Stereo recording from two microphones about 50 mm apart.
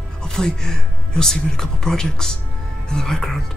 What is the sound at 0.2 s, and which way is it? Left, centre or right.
Speech, centre.